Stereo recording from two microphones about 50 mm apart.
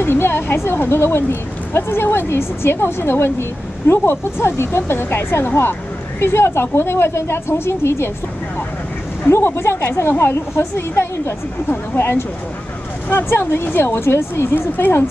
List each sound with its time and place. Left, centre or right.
0.0 s speech: left
9.3 s a woman's voice: left
11.7 s speech: left
14.8 s speech: left